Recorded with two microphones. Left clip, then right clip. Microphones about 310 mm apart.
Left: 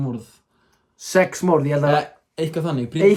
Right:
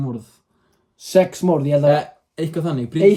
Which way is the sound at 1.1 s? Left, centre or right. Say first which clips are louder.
Right 1 dB; left.